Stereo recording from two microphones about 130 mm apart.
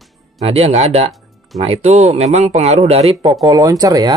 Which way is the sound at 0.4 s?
50° right (ahead or behind).